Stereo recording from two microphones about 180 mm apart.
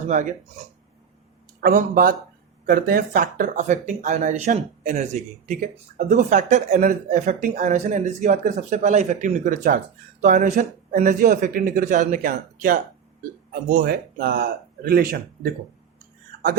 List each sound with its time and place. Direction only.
0.1 s speech: 45° right (ahead or behind)
1.6 s speech: 50° right (ahead or behind)